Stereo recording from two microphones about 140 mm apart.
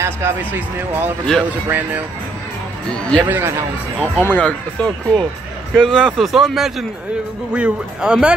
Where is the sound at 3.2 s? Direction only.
15° right (ahead or behind).